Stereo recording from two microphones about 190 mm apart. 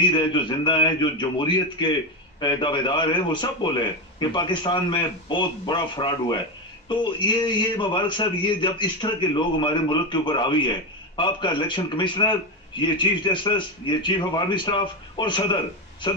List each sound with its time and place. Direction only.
0.0 s a man's voice: 25° left (ahead or behind)